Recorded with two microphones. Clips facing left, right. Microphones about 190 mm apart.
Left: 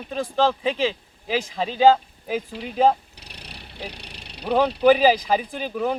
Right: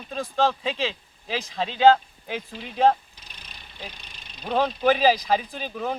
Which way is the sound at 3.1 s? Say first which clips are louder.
Left 6 dB; 75° left (ahead or behind).